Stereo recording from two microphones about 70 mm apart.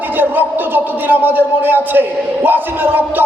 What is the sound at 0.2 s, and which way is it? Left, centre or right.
Speech, right.